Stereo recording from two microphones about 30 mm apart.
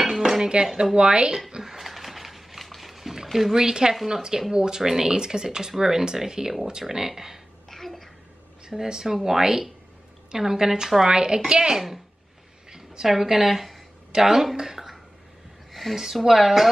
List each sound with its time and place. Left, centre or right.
0.0 s dishes: centre
0.4 s speech: right
1.6 s a sound: centre
3.5 s speech: right
7.7 s babbling: centre
8.8 s speech: right
13.0 s speech: centre
15.9 s speech: centre